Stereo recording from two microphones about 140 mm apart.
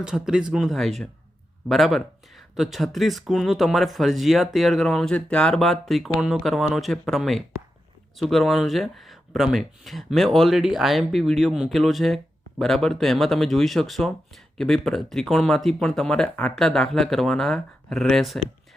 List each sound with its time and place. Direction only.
0.0 s speech: 5° right (ahead or behind)